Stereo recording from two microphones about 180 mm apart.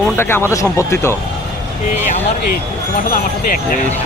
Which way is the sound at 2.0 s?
40° left (ahead or behind).